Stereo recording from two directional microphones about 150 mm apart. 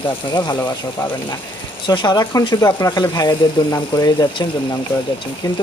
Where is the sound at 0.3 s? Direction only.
30° left (ahead or behind).